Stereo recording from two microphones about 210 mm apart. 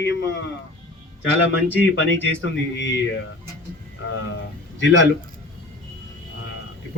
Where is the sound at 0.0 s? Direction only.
55° left (ahead or behind).